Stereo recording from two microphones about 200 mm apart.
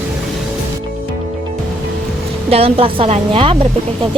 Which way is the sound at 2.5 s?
30° right (ahead or behind).